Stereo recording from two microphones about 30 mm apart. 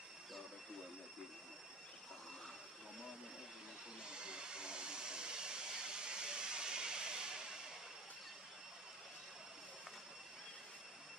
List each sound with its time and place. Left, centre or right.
4.0 s hair dryer: right